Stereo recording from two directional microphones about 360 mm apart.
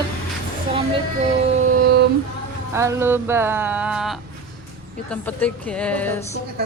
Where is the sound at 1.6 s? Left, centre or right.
Right.